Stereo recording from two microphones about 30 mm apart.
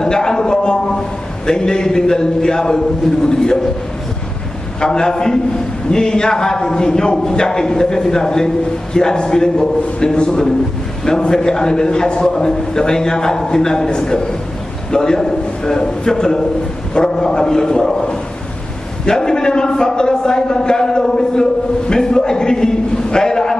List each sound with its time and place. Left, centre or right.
0.0 s a sound: left
1.4 s a man's voice: left
4.7 s a man's voice: left
19.0 s a man's voice: left